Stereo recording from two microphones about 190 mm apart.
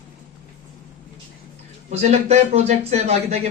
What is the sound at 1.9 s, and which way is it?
Speech, 35° right (ahead or behind).